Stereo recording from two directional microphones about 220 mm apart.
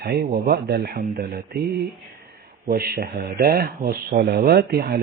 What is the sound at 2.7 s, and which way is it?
Speech, 45° right (ahead or behind).